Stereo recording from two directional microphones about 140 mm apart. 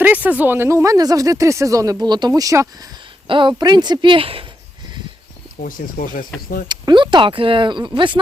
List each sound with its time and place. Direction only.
0.0 s speech: 10° right (ahead or behind)
3.2 s speech: 35° right (ahead or behind)
5.6 s speech: 80° left
6.7 s speech: 35° right (ahead or behind)